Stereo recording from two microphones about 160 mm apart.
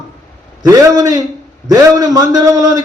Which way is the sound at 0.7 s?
20° right (ahead or behind).